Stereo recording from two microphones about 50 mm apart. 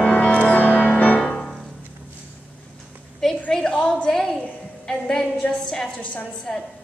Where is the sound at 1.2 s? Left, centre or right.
Centre.